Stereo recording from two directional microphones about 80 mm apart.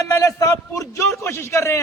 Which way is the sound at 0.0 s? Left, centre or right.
Left.